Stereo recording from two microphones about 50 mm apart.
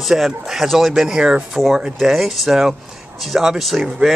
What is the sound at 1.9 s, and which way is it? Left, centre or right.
Speech, centre.